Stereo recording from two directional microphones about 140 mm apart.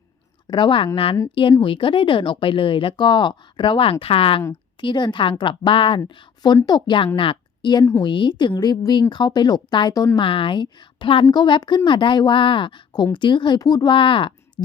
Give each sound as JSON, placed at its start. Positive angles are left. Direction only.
{"t": 0.4, "sound": "speech", "side_deg": 35}
{"t": 10.2, "sound": "speech", "side_deg": 40}